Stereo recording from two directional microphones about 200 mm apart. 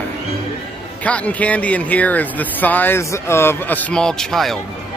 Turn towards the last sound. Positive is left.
turn(degrees=0)  # may be behind; listen again after turning